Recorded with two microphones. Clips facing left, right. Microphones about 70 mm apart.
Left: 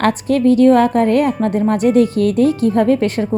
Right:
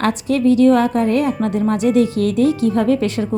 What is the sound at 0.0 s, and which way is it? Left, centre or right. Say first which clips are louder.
A woman's voice: left 2 dB; left.